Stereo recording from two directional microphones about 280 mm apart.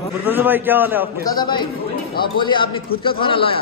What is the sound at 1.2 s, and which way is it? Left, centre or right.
Speech, centre.